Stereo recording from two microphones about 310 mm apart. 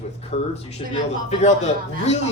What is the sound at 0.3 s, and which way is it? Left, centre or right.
Speech, centre.